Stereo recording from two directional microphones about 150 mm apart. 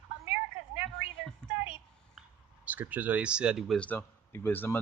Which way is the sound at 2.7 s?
10° right (ahead or behind).